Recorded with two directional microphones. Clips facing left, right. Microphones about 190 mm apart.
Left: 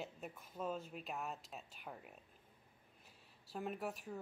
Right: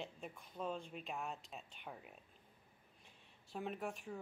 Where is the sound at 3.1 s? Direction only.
5° left (ahead or behind).